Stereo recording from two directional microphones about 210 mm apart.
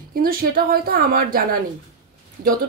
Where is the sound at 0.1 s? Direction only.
45° right (ahead or behind).